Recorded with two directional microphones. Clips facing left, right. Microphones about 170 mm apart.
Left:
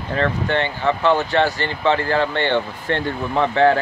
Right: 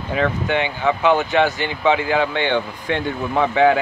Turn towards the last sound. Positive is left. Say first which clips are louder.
# even
turn(degrees=-5)  # may be behind; listen again after turning